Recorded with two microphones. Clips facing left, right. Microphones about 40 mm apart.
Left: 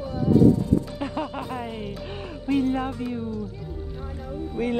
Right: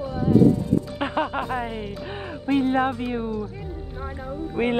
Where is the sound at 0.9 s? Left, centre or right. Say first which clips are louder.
Right 4 dB; right.